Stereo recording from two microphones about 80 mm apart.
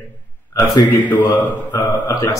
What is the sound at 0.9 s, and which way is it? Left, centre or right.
A man's voice, left.